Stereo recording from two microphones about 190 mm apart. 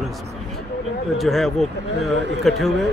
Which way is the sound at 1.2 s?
Centre (ahead or behind).